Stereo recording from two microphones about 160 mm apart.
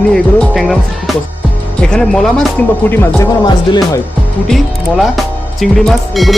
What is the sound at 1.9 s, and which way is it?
Speech, 5° left (ahead or behind).